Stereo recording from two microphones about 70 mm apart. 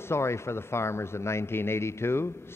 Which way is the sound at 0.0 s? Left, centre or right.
Left.